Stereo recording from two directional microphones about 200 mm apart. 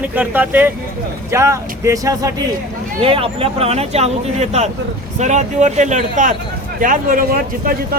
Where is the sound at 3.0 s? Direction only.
25° right (ahead or behind).